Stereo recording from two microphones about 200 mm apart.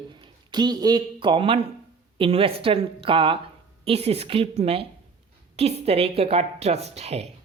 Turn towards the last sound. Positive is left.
turn(degrees=-30)  # may be behind; listen again after turning